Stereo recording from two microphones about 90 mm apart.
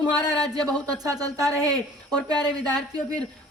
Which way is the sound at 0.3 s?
45° right (ahead or behind).